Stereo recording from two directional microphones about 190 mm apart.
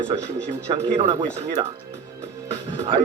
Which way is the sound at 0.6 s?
35° right (ahead or behind).